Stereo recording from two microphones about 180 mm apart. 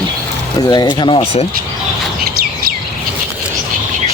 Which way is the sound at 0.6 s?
25° left (ahead or behind).